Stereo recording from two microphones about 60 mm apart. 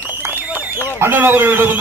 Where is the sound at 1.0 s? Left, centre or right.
Right.